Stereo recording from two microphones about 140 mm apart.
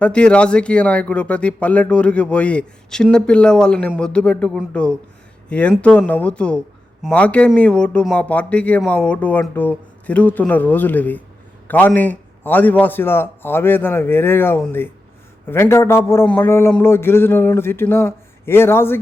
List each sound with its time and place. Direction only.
0.0 s speech: 5° left (ahead or behind)